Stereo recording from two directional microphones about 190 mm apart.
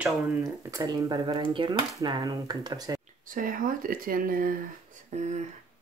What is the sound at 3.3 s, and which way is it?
Speech, 45° right (ahead or behind).